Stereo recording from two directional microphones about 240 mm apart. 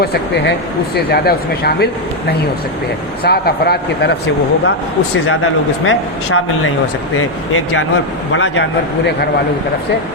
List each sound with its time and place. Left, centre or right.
0.0 s speech: left
3.2 s speech: left
5.3 s a man's voice: left